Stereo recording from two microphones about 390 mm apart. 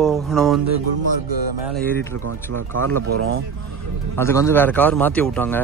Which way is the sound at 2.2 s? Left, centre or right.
Right.